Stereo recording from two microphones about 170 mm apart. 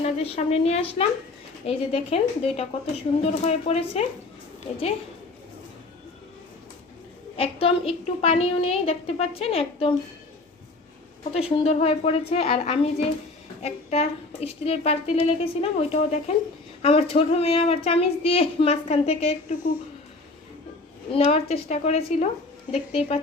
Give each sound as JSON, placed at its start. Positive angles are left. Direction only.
{"t": 0.0, "sound": "speech", "side_deg": 40}
{"t": 7.3, "sound": "speech", "side_deg": 35}
{"t": 11.2, "sound": "speech", "side_deg": 35}
{"t": 21.1, "sound": "speech", "side_deg": 35}